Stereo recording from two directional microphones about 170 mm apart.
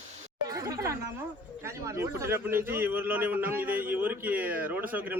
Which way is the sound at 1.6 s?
15° right (ahead or behind).